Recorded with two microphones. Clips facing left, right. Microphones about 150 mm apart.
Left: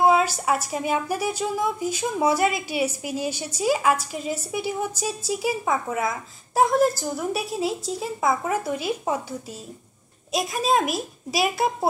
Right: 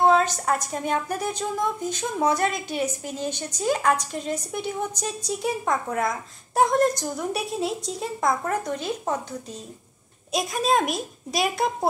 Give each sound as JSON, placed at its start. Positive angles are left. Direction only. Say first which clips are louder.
{"t": 0.0, "sound": "a woman's voice", "louder": "even", "side_deg": 10}